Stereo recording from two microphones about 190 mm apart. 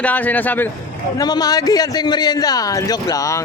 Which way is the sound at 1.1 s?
20° left (ahead or behind).